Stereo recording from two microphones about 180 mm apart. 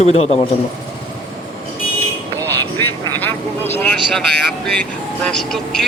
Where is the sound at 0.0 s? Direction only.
35° left (ahead or behind).